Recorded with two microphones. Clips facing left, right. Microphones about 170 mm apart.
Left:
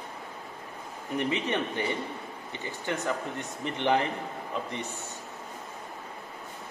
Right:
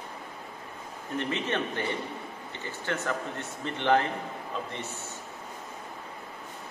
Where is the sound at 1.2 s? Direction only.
15° left (ahead or behind).